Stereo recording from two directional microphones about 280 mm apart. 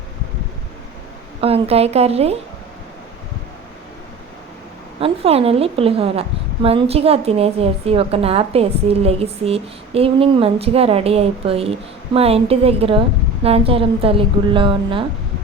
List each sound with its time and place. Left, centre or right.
1.4 s a woman's voice: right
4.9 s a woman's voice: right